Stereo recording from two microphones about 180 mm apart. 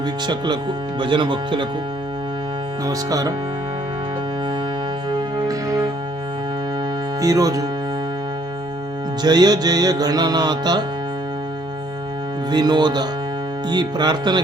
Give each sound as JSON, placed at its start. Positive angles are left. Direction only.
{"t": 0.3, "sound": "music", "side_deg": -25}
{"t": 2.8, "sound": "music", "side_deg": -20}
{"t": 7.2, "sound": "music", "side_deg": -20}
{"t": 9.2, "sound": "music", "side_deg": -20}
{"t": 12.5, "sound": "music", "side_deg": -25}